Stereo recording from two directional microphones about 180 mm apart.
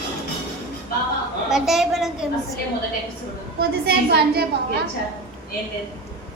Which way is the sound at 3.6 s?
60° right (ahead or behind).